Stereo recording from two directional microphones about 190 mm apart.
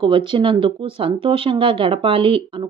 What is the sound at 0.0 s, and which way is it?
Speech, 25° right (ahead or behind).